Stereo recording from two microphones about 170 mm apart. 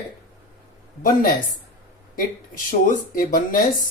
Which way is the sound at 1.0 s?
55° left (ahead or behind).